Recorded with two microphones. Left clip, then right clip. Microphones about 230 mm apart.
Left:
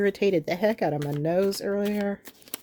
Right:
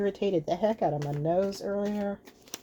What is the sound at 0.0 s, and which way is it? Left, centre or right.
Speech, left.